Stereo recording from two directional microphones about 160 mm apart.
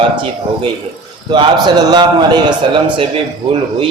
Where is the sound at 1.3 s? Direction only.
30° right (ahead or behind).